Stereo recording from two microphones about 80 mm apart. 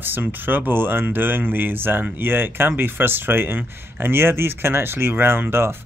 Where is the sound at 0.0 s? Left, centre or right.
Right.